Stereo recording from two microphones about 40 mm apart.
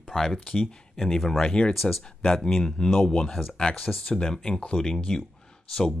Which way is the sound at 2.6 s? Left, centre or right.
Centre.